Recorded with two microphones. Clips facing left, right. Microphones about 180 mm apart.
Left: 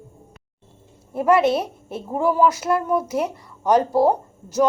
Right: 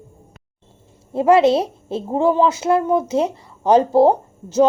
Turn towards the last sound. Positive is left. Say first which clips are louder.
# right 4 dB
turn(degrees=-30)  # may be behind; listen again after turning